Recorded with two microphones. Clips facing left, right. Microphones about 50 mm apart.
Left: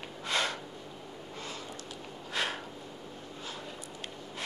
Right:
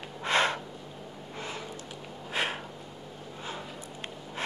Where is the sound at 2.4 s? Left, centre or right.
Right.